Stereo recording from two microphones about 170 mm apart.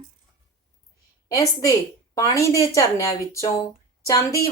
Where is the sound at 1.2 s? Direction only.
20° left (ahead or behind).